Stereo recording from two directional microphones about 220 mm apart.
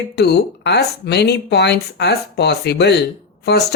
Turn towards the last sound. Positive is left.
turn(degrees=50)  # may be behind; listen again after turning